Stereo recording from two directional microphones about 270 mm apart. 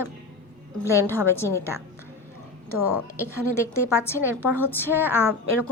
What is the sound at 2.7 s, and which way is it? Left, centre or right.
Speech, left.